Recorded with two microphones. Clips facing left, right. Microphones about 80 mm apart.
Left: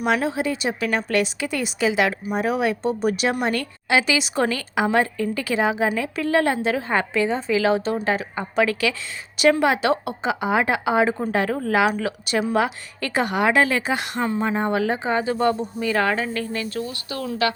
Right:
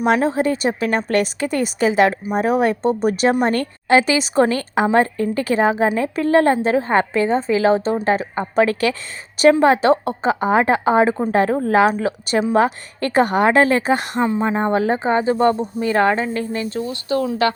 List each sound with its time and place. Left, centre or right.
0.0 s a woman's voice: right
0.8 s speech: right
1.1 s a woman's voice: right
12.5 s speech: right
14.2 s speech: right